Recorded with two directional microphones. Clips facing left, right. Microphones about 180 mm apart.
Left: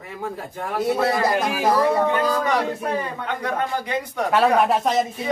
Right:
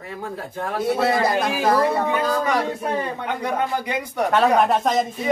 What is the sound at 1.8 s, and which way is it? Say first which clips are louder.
Speech: left 1 dB; 10° right (ahead or behind).